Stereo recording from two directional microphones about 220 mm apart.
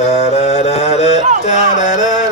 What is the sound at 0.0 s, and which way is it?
Music, 30° left (ahead or behind).